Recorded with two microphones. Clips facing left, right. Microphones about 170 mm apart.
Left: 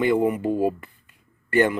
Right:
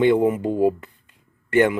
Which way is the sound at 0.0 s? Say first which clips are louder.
Right 3 dB; 20° right (ahead or behind).